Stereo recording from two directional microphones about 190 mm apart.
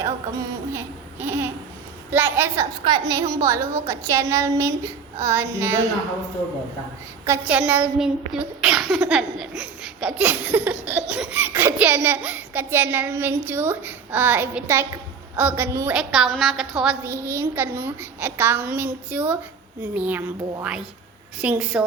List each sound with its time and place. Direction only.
0.0 s a child's voice: 15° right (ahead or behind)
7.3 s a child's voice: 5° right (ahead or behind)